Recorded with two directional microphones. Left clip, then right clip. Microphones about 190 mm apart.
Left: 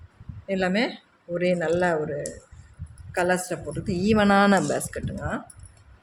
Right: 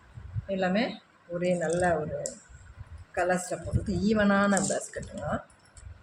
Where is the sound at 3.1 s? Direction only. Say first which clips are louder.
Left 4 dB; 55° left (ahead or behind).